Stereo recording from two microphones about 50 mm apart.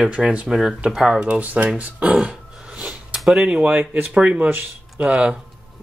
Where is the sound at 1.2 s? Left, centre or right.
Right.